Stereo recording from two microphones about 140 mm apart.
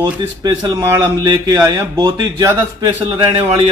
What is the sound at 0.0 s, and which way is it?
Speech, 30° right (ahead or behind).